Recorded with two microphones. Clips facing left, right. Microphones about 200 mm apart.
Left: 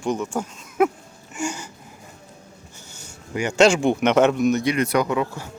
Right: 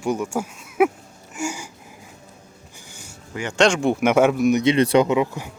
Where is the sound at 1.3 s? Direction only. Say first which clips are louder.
Even; 10° right (ahead or behind).